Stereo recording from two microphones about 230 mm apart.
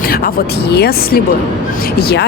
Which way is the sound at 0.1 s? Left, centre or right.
Left.